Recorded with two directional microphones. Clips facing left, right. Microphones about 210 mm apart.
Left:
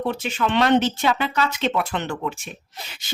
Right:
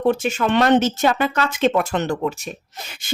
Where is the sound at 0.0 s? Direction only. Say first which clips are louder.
Right 5 dB; 45° right (ahead or behind).